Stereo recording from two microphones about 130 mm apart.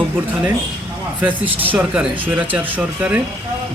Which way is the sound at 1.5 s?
10° right (ahead or behind).